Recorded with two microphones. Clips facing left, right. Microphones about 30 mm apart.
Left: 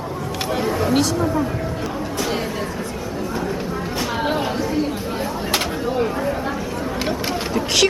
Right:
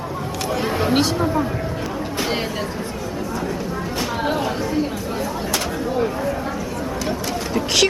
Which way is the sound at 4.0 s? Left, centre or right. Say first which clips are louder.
Even; centre.